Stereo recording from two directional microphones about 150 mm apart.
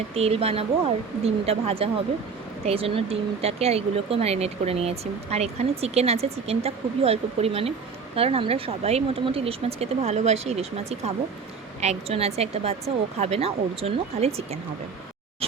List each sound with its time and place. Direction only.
0.1 s a woman's voice: 40° right (ahead or behind)